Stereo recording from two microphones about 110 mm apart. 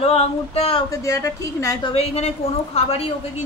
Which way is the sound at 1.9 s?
65° left (ahead or behind).